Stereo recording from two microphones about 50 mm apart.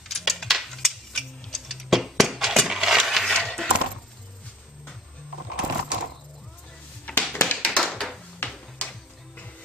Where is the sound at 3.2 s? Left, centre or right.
Centre.